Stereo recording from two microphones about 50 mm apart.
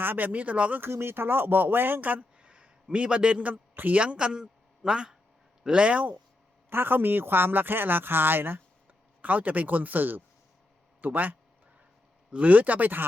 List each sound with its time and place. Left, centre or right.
0.0 s speech: right
0.3 s a man's voice: right
0.8 s speech: right
2.4 s a sound: right
2.9 s a man's voice: right
3.5 s a man's voice: right
4.0 s a woman's voice: centre
6.7 s speech: right
9.2 s speech: right